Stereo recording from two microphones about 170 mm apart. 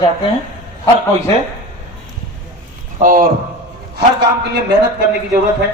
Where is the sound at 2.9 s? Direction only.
55° right (ahead or behind).